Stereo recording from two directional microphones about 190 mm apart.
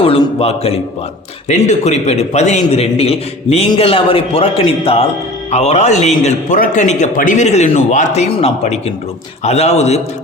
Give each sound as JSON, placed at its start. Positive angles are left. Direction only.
{"t": 0.0, "sound": "a man's voice", "side_deg": 30}